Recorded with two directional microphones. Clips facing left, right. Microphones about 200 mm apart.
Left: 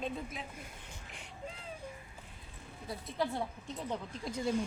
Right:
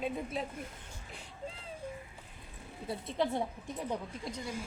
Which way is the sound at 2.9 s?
25° right (ahead or behind).